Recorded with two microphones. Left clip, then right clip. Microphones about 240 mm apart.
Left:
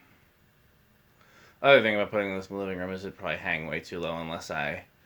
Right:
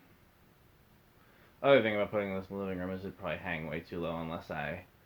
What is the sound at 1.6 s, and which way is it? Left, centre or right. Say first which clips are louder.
Speech: left 6 dB; left.